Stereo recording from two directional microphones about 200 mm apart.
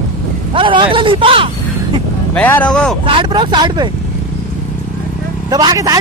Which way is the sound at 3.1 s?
25° right (ahead or behind).